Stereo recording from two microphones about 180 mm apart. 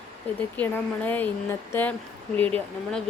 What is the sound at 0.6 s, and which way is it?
Speech, 10° left (ahead or behind).